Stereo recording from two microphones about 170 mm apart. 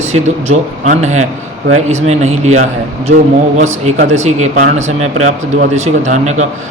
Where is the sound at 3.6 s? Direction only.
40° right (ahead or behind).